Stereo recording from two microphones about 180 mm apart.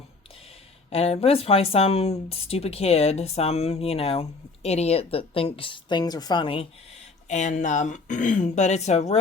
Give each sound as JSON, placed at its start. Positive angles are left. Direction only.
{"t": 0.9, "sound": "speech", "side_deg": 35}
{"t": 7.3, "sound": "speech", "side_deg": 40}